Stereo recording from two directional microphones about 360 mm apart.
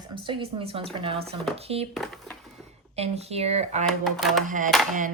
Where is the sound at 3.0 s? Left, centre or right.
Centre.